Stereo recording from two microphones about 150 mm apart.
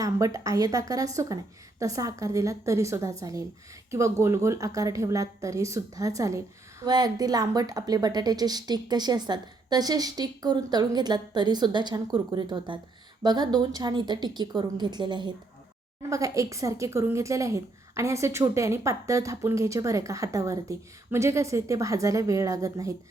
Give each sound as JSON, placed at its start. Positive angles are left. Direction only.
{"t": 0.0, "sound": "a woman's voice", "side_deg": -20}